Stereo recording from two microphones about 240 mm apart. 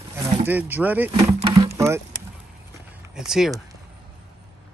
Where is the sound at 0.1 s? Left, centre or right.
Centre.